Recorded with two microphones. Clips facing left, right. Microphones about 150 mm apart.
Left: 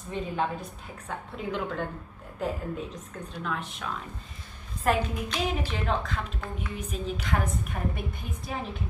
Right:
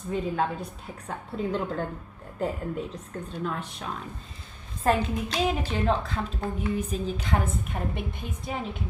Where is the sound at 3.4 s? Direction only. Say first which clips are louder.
Even; 35° right (ahead or behind).